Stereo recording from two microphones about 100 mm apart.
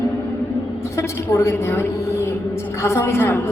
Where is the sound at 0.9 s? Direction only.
30° left (ahead or behind).